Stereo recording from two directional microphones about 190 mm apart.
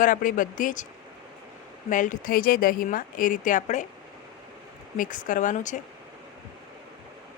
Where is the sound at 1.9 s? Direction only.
45° left (ahead or behind).